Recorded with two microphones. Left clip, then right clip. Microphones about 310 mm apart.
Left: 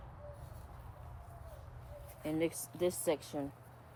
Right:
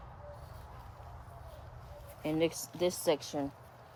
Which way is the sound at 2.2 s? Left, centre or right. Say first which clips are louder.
Right 4 dB; right.